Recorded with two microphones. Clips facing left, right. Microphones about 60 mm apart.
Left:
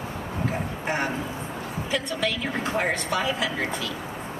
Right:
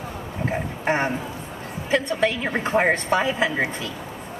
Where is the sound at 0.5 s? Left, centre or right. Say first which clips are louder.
Right 6 dB; right.